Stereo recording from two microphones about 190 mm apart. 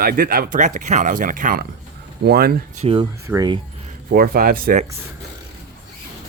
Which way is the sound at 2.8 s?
30° right (ahead or behind).